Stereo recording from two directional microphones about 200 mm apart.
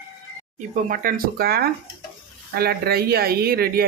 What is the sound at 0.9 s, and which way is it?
Speech, 45° right (ahead or behind).